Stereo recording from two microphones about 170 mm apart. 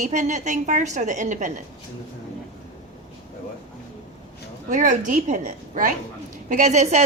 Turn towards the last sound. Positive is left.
turn(degrees=-40)  # may be behind; listen again after turning